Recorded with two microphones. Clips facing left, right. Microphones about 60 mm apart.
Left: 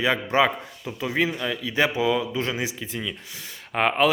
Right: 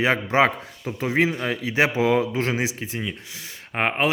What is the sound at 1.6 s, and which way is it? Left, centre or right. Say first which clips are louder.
Speech: right 2 dB; right.